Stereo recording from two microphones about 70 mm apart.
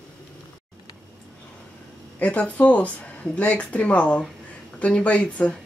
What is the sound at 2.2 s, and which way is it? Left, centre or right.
Speech, left.